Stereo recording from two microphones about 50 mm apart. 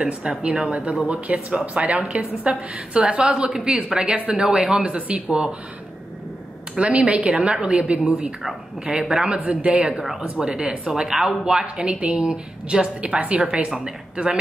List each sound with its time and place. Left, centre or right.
0.0 s a woman's voice: right
6.7 s a woman's voice: right; by 11.6 s centre
11.6 s a woman's voice: right
13.7 s a woman's voice: centre